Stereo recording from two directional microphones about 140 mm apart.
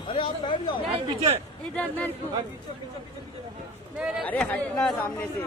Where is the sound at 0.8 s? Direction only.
40° right (ahead or behind).